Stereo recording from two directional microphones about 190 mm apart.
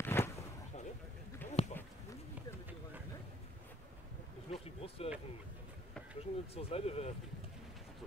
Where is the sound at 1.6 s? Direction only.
30° left (ahead or behind).